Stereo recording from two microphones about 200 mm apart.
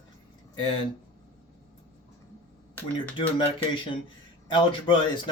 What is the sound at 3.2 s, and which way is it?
Speech, 25° left (ahead or behind).